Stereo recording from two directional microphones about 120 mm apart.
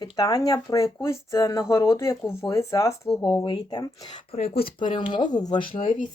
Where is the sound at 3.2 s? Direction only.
40° left (ahead or behind).